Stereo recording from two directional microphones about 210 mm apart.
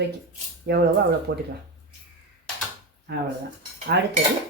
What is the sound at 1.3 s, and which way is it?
Speech, 55° right (ahead or behind).